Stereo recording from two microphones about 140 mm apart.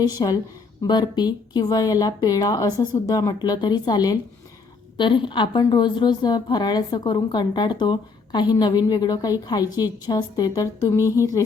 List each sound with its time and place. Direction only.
0.0 s a woman's voice: 30° left (ahead or behind)